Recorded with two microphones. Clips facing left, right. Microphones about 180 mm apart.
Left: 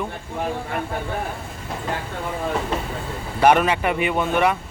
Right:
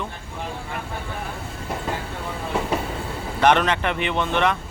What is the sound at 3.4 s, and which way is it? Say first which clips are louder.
A man's voice: left 2 dB; 10° left (ahead or behind).